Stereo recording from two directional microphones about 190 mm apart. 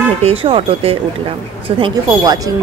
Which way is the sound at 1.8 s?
20° right (ahead or behind).